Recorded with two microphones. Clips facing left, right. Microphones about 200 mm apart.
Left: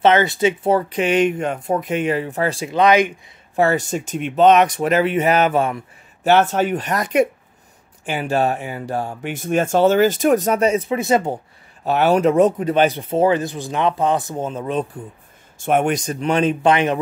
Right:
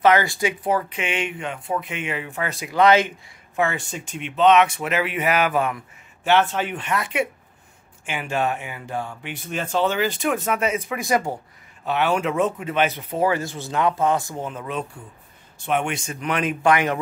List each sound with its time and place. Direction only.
0.0 s speech: 25° left (ahead or behind)
2.8 s speech: 15° left (ahead or behind)
3.5 s speech: 40° left (ahead or behind)
6.2 s speech: 40° left (ahead or behind)
11.0 s speech: 25° left (ahead or behind)
11.8 s speech: 40° left (ahead or behind)
15.5 s speech: 45° left (ahead or behind); by 17.0 s 20° left (ahead or behind)